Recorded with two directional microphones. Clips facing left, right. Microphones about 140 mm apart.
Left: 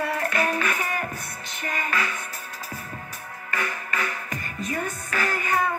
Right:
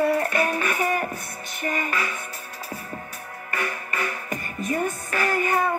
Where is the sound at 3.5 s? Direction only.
45° right (ahead or behind).